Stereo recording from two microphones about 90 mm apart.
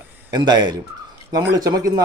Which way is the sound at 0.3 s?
50° right (ahead or behind).